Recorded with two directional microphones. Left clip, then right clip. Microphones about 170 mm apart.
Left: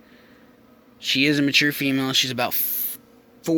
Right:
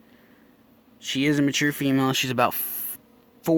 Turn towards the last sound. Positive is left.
turn(degrees=-40)  # may be behind; listen again after turning